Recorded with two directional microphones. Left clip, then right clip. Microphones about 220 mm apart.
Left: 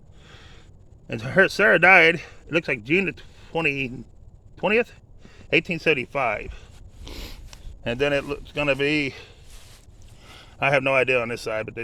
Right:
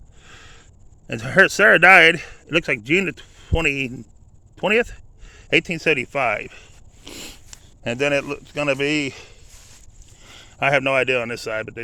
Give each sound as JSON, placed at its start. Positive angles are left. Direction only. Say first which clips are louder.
{"t": 0.2, "sound": "sniff", "louder": "right 4 dB", "side_deg": -20}
{"t": 1.0, "sound": "speech", "louder": "right 4 dB", "side_deg": -25}